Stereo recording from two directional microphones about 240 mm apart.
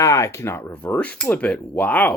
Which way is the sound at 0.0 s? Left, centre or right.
Centre.